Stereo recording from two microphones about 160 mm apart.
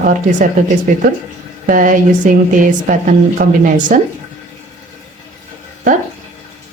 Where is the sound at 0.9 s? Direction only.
55° right (ahead or behind).